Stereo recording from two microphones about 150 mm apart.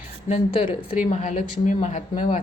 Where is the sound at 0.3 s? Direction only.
45° left (ahead or behind).